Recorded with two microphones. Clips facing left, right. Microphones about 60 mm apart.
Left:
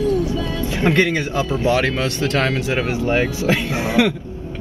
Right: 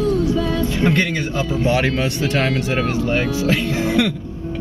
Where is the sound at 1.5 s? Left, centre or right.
Centre.